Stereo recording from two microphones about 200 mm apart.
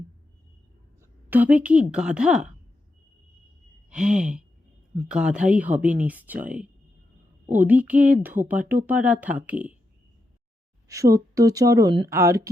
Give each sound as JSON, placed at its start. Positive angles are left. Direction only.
{"t": 1.3, "sound": "speech", "side_deg": -10}
{"t": 3.8, "sound": "a sound", "side_deg": -5}
{"t": 4.9, "sound": "speech", "side_deg": -5}
{"t": 10.8, "sound": "speech", "side_deg": -15}